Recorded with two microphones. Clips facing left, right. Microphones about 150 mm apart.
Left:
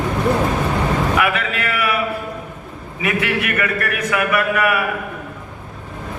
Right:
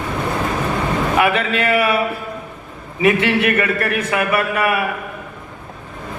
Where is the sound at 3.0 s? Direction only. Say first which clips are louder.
Right 6 dB; 30° right (ahead or behind).